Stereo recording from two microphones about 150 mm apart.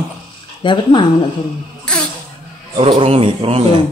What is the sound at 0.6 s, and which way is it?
Speech, 30° left (ahead or behind).